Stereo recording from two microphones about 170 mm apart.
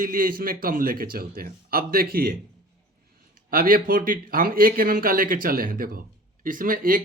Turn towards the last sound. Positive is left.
turn(degrees=-55)  # may be behind; listen again after turning